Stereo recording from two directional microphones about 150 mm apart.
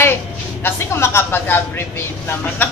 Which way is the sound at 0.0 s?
15° left (ahead or behind).